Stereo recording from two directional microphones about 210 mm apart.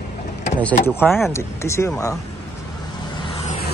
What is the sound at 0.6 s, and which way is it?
Speech, 10° left (ahead or behind).